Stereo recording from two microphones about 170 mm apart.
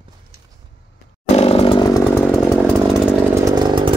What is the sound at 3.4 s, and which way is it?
Chainsaw, 25° right (ahead or behind).